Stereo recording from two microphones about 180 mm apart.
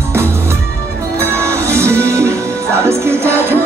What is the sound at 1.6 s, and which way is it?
Music, 15° right (ahead or behind).